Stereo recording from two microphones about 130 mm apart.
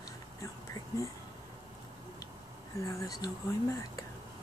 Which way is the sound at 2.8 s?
25° left (ahead or behind).